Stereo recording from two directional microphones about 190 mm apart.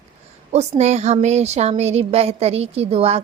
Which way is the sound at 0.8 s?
35° right (ahead or behind).